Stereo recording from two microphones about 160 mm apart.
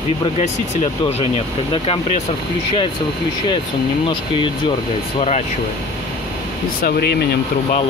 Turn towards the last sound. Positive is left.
turn(degrees=80)